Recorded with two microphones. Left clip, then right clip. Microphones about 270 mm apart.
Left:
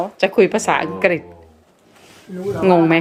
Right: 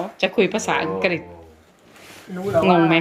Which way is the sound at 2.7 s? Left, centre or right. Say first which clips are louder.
Left 6 dB; left.